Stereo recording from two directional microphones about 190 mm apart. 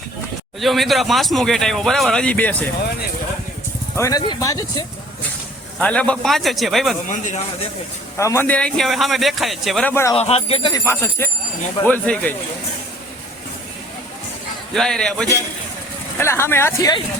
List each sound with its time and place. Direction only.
0.6 s speech: centre (ahead or behind)
3.9 s speech: 15° left (ahead or behind)
5.8 s speech: 5° left (ahead or behind)
7.1 s a man's voice: 40° left (ahead or behind)
8.2 s speech: 15° left (ahead or behind)
9.9 s speech: 15° left (ahead or behind)
10.2 s speech: 30° left (ahead or behind); by 12.3 s 5° left (ahead or behind)
14.7 s speech: 5° left (ahead or behind)